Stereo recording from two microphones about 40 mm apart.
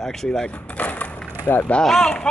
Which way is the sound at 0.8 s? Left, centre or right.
Left.